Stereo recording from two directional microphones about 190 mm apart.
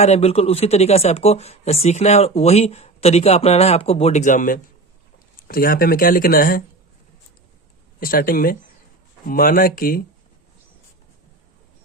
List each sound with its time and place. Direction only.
0.0 s speech: 35° left (ahead or behind)
7.9 s speech: 50° left (ahead or behind)